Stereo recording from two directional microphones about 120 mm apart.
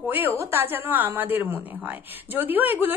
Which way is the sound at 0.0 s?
15° right (ahead or behind).